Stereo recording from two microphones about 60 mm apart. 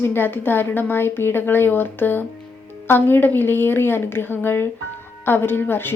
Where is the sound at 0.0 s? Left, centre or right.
Left.